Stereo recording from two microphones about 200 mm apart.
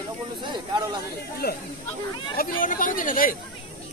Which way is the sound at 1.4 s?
55° left (ahead or behind).